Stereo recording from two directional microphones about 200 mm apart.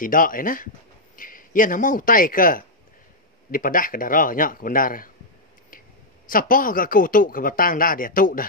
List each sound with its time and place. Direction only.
0.0 s speech: 45° left (ahead or behind)
6.2 s speech: 45° left (ahead or behind)